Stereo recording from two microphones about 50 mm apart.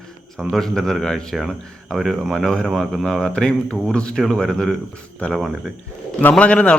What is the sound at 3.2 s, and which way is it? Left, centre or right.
A man's voice, centre.